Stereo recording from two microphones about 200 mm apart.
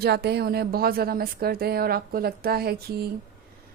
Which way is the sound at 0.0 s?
55° right (ahead or behind).